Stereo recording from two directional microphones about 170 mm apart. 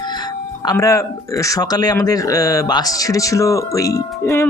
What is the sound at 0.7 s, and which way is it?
Speech, 20° left (ahead or behind).